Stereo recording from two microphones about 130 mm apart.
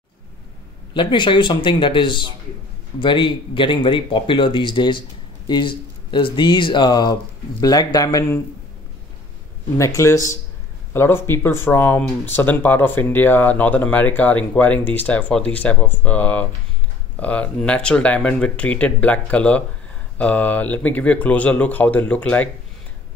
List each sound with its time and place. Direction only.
0.9 s speech: 40° left (ahead or behind)
9.8 s speech: 25° left (ahead or behind)